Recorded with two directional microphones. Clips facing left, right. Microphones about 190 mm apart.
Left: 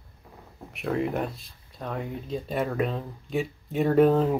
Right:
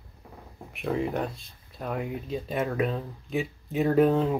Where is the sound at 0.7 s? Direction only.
Centre (ahead or behind).